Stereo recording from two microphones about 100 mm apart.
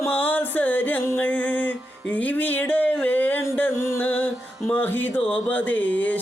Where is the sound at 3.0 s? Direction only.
20° left (ahead or behind).